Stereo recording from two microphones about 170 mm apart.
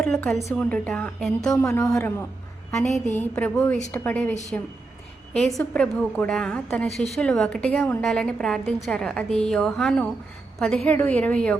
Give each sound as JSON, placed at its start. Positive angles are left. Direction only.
{"t": 0.0, "sound": "a woman's voice", "side_deg": 5}
{"t": 1.6, "sound": "a woman's voice", "side_deg": 15}